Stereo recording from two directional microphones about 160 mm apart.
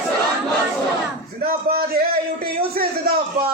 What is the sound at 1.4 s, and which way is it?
Speech, 70° right (ahead or behind).